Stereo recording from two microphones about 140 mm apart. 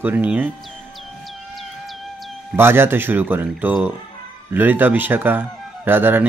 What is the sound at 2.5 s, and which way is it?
Speech, 15° right (ahead or behind).